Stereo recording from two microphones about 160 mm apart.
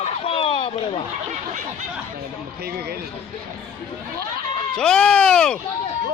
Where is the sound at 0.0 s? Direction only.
35° left (ahead or behind).